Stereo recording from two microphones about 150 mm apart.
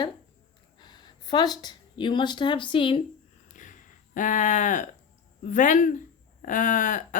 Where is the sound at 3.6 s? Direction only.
60° left (ahead or behind).